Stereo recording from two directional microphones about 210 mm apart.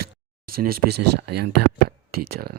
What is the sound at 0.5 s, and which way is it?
Speech, 45° right (ahead or behind).